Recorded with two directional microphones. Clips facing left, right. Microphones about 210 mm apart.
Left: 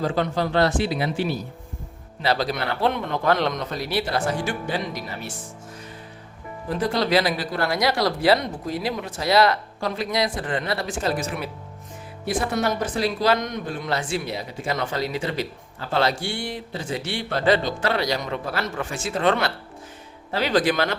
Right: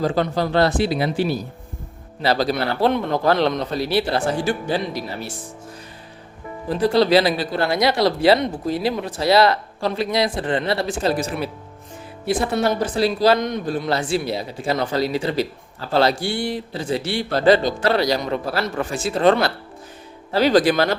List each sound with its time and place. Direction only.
0.0 s a man's voice: 35° right (ahead or behind)
6.7 s speech: 30° right (ahead or behind)
12.5 s a man's voice: 30° right (ahead or behind)